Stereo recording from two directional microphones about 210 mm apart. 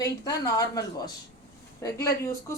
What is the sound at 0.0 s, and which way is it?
A woman's voice, 15° left (ahead or behind).